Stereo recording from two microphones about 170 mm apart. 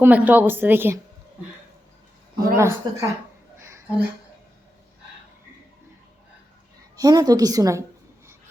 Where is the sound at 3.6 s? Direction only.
15° right (ahead or behind).